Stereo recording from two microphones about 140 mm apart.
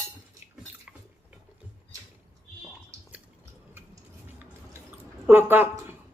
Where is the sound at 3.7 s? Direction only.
15° right (ahead or behind).